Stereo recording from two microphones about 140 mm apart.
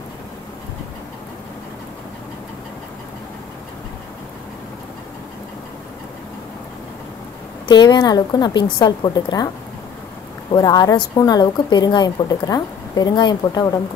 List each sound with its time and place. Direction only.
7.6 s a woman's voice: 30° left (ahead or behind)
10.5 s a woman's voice: 30° left (ahead or behind)